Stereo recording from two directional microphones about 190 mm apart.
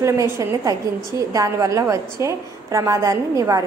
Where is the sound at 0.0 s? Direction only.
15° right (ahead or behind).